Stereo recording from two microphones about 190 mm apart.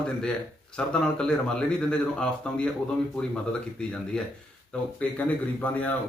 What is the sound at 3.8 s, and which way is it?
Speech, 5° left (ahead or behind).